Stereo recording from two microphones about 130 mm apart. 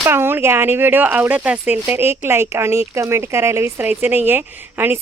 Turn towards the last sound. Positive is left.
turn(degrees=-15)  # may be behind; listen again after turning